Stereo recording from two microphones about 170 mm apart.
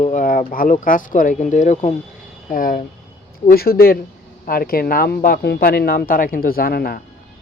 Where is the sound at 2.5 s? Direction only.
55° left (ahead or behind).